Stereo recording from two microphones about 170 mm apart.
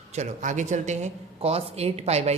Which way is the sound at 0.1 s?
40° right (ahead or behind).